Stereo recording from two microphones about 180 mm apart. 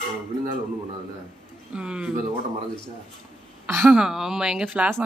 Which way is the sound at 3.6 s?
15° right (ahead or behind).